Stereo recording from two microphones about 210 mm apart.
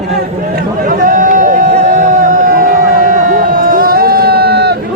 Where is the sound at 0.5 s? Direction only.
40° right (ahead or behind).